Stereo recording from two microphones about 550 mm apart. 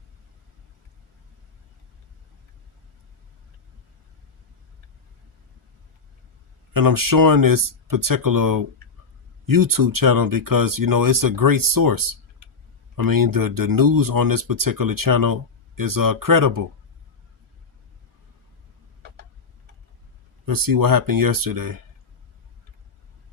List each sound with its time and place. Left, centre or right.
6.7 s speech: right
20.4 s speech: right